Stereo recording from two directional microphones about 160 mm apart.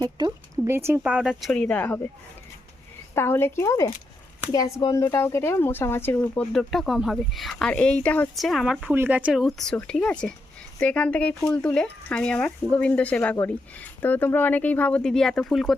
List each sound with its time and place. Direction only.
0.2 s speech: 20° right (ahead or behind)
1.1 s speech: 5° right (ahead or behind)
3.2 s speech: 15° left (ahead or behind)